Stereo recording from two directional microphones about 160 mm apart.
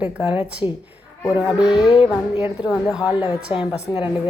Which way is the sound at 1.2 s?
25° left (ahead or behind).